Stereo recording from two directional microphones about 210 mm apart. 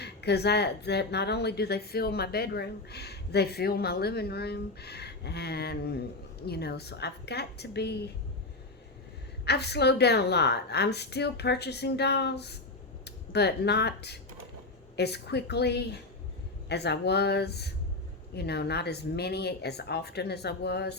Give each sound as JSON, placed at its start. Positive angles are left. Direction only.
{"t": 0.0, "sound": "speech", "side_deg": 50}
{"t": 9.4, "sound": "speech", "side_deg": 50}